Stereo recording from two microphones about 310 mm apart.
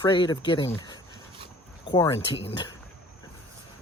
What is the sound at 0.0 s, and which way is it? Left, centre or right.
Speech, centre.